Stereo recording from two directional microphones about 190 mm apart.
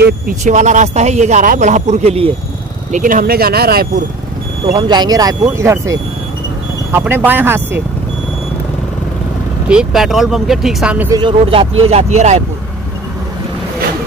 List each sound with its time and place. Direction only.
0.4 s a man's voice: 40° right (ahead or behind)
2.9 s speech: 45° right (ahead or behind)
4.7 s speech: 20° right (ahead or behind)
9.7 s speech: 5° right (ahead or behind)
11.1 s a man's voice: 25° right (ahead or behind)